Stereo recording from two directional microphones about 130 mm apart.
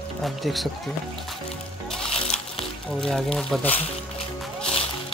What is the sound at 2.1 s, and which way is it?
Music, 50° left (ahead or behind).